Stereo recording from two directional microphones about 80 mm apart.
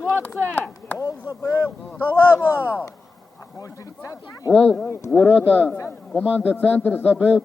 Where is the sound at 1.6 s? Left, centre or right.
Left.